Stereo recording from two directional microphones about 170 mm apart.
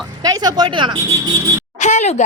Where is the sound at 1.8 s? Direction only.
45° left (ahead or behind).